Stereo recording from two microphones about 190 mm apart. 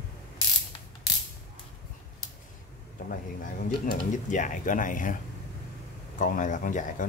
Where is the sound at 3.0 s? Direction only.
50° left (ahead or behind).